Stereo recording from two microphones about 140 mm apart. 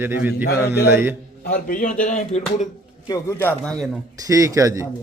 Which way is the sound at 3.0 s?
25° left (ahead or behind).